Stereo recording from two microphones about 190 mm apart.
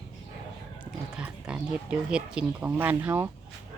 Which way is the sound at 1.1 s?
5° right (ahead or behind).